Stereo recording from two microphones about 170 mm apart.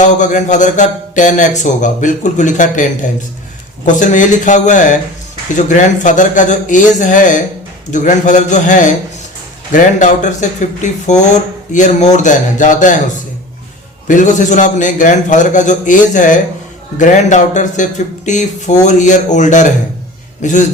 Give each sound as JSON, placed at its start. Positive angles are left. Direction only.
{"t": 0.0, "sound": "a man's voice", "side_deg": 45}
{"t": 14.1, "sound": "a man's voice", "side_deg": 50}